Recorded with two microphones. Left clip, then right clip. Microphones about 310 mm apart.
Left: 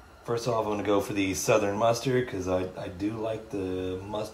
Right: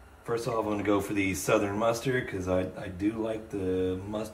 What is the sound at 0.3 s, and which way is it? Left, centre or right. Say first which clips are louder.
Speech: left 2 dB; left.